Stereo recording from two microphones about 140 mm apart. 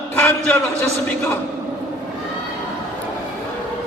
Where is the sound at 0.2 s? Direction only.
10° left (ahead or behind).